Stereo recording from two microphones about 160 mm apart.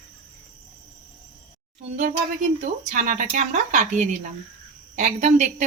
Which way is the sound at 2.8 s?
50° right (ahead or behind).